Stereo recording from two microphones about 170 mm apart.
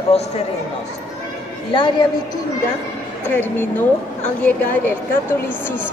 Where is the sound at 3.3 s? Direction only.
10° left (ahead or behind).